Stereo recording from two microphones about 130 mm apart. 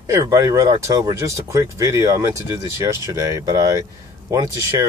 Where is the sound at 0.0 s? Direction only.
25° right (ahead or behind).